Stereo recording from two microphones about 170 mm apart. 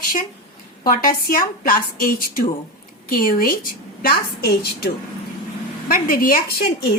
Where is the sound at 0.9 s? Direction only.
55° left (ahead or behind).